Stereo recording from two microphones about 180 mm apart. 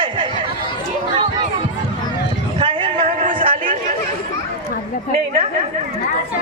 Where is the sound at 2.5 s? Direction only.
30° right (ahead or behind).